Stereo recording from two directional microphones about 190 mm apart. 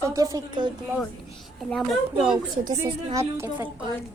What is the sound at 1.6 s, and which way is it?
Speech, centre (ahead or behind).